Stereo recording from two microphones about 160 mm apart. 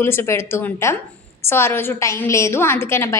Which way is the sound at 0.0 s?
15° left (ahead or behind).